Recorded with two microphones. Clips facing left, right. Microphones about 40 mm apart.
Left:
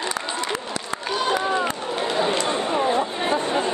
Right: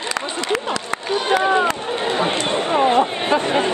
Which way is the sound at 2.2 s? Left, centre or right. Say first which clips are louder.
Right 2 dB; right.